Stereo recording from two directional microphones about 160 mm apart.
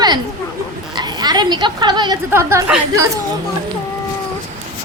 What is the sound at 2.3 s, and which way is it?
Speech, 15° right (ahead or behind).